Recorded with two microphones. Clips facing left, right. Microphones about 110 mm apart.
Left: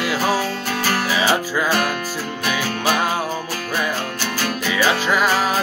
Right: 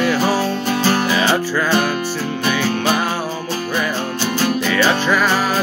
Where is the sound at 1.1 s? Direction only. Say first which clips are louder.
Right 2 dB; 10° left (ahead or behind).